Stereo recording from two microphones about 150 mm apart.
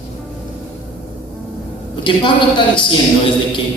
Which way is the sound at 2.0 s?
30° left (ahead or behind).